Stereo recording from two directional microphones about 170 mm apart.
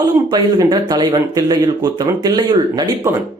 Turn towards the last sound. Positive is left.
turn(degrees=-25)  # may be behind; listen again after turning